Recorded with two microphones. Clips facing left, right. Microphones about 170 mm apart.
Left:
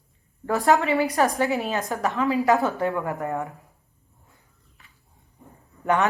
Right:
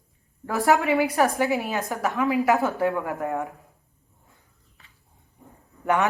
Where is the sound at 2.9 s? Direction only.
Centre (ahead or behind).